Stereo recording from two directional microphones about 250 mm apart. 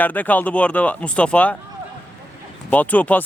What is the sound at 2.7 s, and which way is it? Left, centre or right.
Speech, centre.